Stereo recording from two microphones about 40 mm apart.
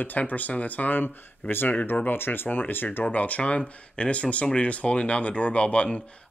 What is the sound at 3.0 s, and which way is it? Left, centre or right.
Speech, left.